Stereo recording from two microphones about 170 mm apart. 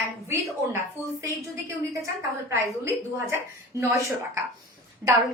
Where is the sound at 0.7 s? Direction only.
15° right (ahead or behind).